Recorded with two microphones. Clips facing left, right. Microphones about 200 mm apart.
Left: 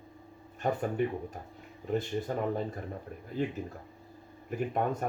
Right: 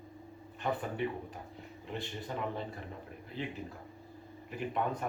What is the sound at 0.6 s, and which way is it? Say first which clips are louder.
Speech: left 5 dB; 45° left (ahead or behind).